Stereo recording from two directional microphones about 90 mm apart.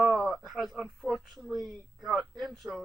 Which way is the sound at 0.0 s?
Centre (ahead or behind).